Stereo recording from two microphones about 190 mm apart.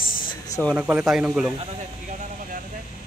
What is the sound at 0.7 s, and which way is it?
Speech, 10° right (ahead or behind).